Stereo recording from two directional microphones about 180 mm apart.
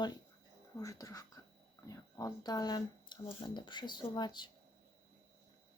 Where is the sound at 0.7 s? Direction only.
20° left (ahead or behind).